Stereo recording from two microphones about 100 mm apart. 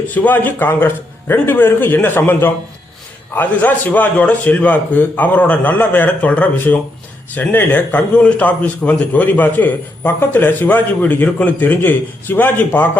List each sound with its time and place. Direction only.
0.1 s a man's voice: 15° left (ahead or behind)